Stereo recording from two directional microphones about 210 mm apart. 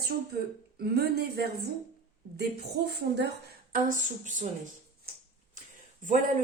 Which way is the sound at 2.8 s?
50° right (ahead or behind).